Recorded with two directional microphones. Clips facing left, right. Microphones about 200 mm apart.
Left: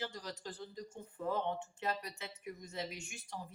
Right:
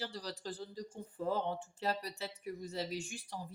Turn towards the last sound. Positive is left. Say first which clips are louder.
# right 5 dB
turn(degrees=-35)  # may be behind; listen again after turning